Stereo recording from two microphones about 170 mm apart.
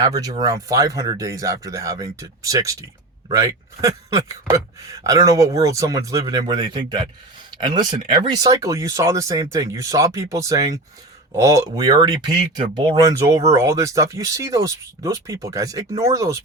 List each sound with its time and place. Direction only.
0.0 s speech: 20° right (ahead or behind)